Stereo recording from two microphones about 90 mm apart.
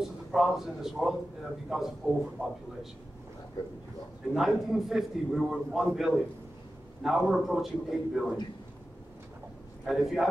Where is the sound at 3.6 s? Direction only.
50° left (ahead or behind).